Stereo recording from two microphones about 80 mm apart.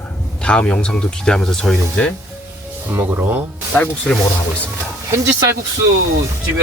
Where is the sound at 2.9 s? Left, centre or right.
Right.